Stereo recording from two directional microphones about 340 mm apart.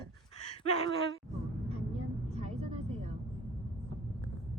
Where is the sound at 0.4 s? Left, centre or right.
Centre.